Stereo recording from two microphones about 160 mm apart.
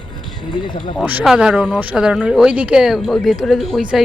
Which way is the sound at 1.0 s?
5° right (ahead or behind).